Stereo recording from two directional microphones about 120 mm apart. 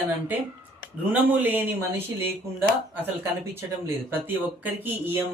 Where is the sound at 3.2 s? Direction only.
20° right (ahead or behind).